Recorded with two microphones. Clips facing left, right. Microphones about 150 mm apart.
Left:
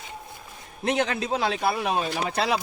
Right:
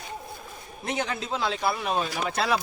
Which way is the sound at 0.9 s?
70° left (ahead or behind).